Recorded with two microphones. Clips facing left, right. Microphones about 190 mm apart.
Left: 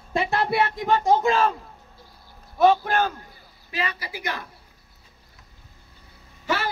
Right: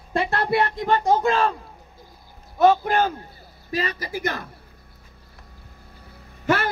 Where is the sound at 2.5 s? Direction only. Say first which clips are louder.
Right 1 dB; centre (ahead or behind).